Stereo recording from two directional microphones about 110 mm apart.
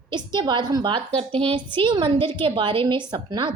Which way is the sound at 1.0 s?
60° right (ahead or behind).